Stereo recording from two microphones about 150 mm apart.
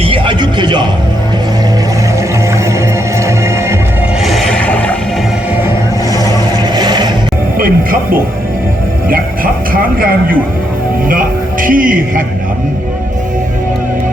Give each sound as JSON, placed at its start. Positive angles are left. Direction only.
{"t": 0.0, "sound": "music", "side_deg": -35}
{"t": 4.2, "sound": "a sound", "side_deg": 0}
{"t": 6.7, "sound": "vehicle", "side_deg": -30}
{"t": 7.6, "sound": "music", "side_deg": -70}
{"t": 11.6, "sound": "speech", "side_deg": -65}